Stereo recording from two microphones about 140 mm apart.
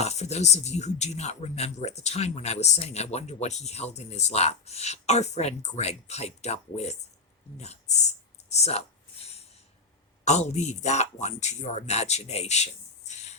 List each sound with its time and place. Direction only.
0.0 s speech: 50° left (ahead or behind)
8.4 s a sound: 50° left (ahead or behind)
10.2 s speech: 55° left (ahead or behind)